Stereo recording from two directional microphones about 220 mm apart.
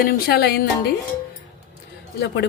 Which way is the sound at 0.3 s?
45° left (ahead or behind).